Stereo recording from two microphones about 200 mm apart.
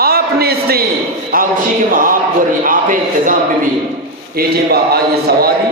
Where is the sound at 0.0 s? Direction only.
50° right (ahead or behind).